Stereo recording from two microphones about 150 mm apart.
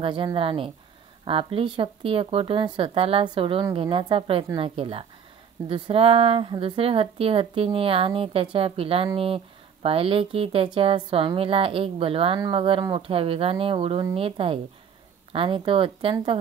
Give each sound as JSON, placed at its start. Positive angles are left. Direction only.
{"t": 0.0, "sound": "speech", "side_deg": -35}